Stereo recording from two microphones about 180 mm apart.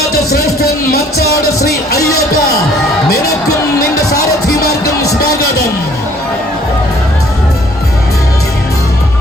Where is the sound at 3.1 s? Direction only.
60° left (ahead or behind).